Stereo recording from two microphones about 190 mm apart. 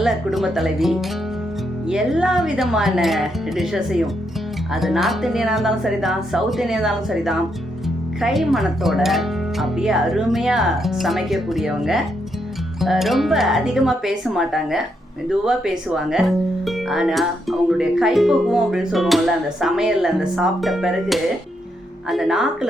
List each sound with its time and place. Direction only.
0.0 s speech: centre (ahead or behind)